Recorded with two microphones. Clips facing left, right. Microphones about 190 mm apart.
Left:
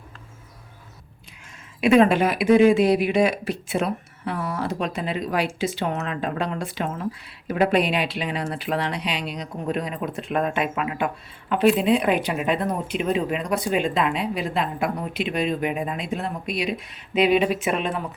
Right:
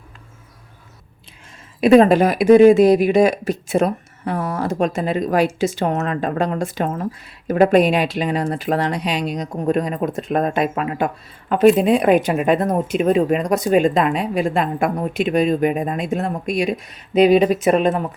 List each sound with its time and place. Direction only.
1.8 s speech: 40° right (ahead or behind)